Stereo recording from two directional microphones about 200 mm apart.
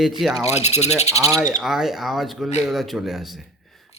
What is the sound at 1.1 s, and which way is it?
Speech, 15° right (ahead or behind).